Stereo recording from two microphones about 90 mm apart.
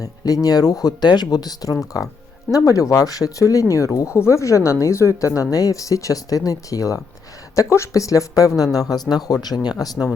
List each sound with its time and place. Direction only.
0.4 s speech: 45° left (ahead or behind)